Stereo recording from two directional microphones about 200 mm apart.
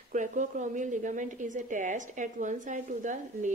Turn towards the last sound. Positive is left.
turn(degrees=-40)  # may be behind; listen again after turning